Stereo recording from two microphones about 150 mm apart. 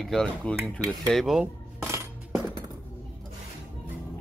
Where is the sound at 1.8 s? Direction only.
15° right (ahead or behind).